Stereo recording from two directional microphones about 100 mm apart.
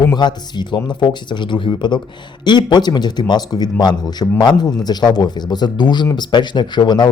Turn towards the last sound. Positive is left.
turn(degrees=45)  # may be behind; listen again after turning